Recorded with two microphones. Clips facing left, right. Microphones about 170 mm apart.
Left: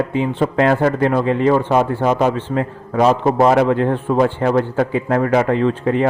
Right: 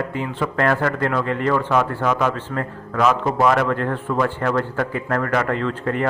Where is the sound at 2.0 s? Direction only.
35° left (ahead or behind).